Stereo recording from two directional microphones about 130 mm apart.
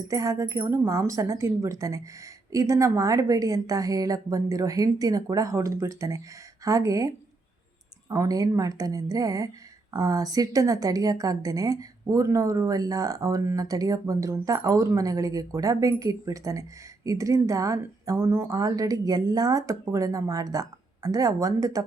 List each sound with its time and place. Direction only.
0.1 s a woman's voice: 25° right (ahead or behind)
8.1 s a woman's voice: 25° right (ahead or behind)